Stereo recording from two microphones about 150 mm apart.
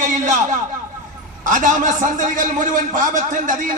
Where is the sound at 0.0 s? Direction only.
55° right (ahead or behind).